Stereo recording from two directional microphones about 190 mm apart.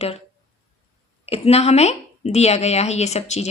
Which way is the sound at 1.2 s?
30° left (ahead or behind).